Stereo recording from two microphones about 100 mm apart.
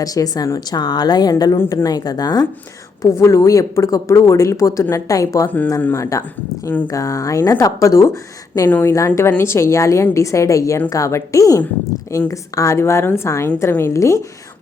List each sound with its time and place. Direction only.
0.0 s a woman's voice: 35° left (ahead or behind)
3.0 s a woman's voice: 30° left (ahead or behind)